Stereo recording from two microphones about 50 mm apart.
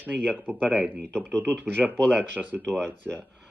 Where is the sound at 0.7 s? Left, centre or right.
Centre.